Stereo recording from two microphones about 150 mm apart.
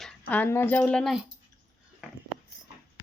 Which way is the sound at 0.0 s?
5° left (ahead or behind).